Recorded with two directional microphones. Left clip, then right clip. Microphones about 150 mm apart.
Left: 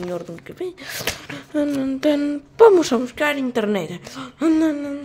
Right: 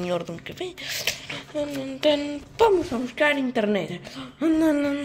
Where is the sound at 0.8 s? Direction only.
65° left (ahead or behind).